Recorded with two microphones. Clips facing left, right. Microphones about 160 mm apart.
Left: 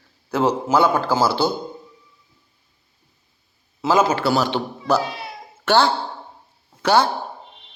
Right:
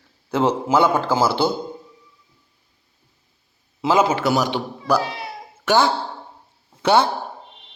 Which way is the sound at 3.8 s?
20° right (ahead or behind).